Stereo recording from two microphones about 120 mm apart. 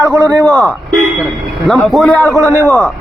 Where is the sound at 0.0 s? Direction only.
20° left (ahead or behind).